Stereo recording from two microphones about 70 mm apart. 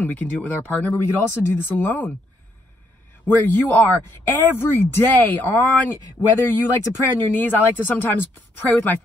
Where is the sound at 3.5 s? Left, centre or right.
Left.